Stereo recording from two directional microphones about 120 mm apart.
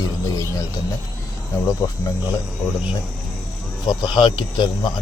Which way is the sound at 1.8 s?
30° left (ahead or behind).